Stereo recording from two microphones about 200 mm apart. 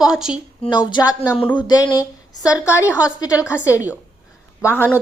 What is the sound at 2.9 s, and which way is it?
Speech, 5° right (ahead or behind).